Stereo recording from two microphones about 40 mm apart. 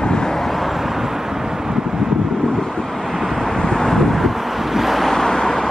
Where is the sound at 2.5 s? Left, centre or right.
Centre.